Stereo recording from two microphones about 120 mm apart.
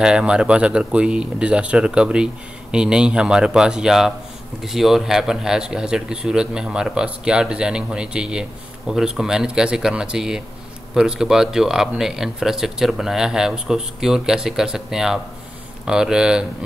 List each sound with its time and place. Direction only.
0.0 s speech: 5° right (ahead or behind)